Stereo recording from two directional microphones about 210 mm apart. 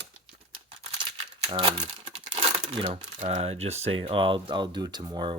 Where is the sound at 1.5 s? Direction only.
20° right (ahead or behind).